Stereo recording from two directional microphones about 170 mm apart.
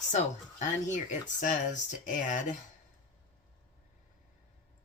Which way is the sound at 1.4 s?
45° left (ahead or behind).